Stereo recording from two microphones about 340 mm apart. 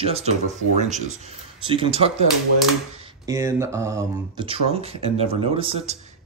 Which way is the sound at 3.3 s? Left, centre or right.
Centre.